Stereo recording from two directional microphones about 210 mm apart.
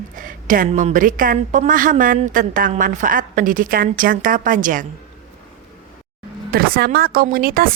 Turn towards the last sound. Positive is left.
turn(degrees=-45)  # may be behind; listen again after turning